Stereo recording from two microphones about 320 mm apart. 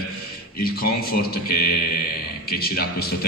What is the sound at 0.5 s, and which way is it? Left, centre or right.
Speech, left.